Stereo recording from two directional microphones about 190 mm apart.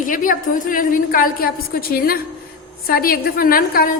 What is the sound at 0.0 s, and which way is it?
A woman's voice, 45° left (ahead or behind).